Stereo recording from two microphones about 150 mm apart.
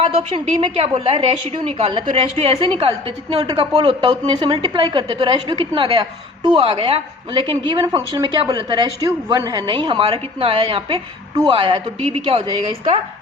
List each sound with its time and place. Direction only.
0.0 s a woman's voice: 45° right (ahead or behind)
7.8 s a woman's voice: 20° right (ahead or behind); by 12.4 s 40° right (ahead or behind)